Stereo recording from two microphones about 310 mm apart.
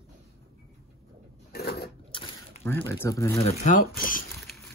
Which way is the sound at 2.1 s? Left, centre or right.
Centre.